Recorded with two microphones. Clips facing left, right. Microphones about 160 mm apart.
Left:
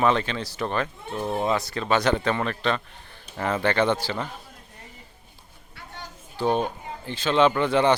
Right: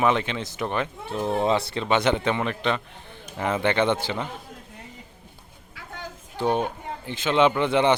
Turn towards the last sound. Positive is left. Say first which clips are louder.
# even
turn(degrees=-20)  # may be behind; listen again after turning